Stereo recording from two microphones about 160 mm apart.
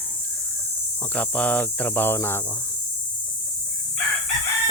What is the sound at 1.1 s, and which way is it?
Speech, 10° left (ahead or behind).